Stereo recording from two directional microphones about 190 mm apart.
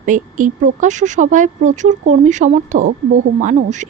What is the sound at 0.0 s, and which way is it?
Speech, 40° right (ahead or behind).